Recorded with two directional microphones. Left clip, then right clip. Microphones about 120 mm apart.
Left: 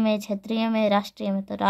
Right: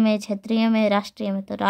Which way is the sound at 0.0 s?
30° right (ahead or behind).